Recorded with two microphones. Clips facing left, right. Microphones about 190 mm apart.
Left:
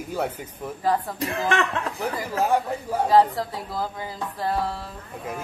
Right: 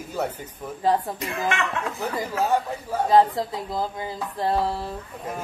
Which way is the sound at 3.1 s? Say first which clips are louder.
Right 1 dB; 20° right (ahead or behind).